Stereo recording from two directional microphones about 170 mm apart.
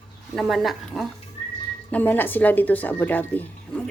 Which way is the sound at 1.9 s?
10° left (ahead or behind).